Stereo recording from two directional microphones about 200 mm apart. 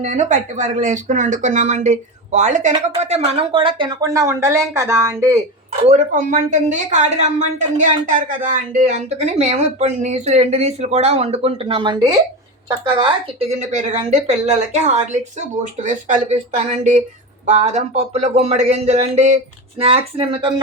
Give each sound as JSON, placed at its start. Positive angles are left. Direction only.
{"t": 0.0, "sound": "speech", "side_deg": -35}
{"t": 5.8, "sound": "speech", "side_deg": -35}